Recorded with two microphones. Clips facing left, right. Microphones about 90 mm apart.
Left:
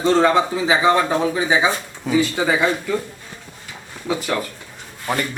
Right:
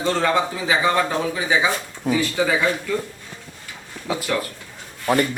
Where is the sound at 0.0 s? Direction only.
25° left (ahead or behind).